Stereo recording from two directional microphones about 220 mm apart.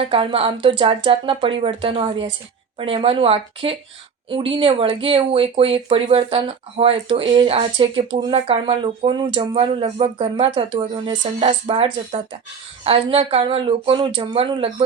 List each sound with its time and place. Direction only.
0.0 s speech: 25° right (ahead or behind)